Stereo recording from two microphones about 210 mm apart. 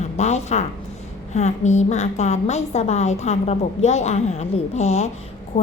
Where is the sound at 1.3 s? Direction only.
35° left (ahead or behind).